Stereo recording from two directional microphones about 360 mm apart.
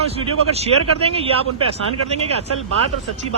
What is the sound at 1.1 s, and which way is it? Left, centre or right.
Speech, centre.